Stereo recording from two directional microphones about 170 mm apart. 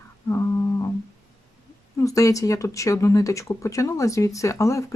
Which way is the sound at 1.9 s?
20° left (ahead or behind).